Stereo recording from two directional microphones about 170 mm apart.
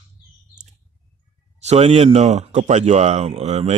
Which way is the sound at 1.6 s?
40° right (ahead or behind).